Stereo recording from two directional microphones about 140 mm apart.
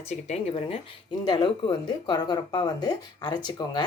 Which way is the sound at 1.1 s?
35° left (ahead or behind).